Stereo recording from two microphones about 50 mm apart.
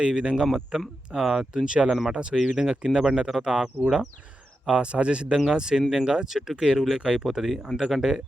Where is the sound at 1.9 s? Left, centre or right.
Centre.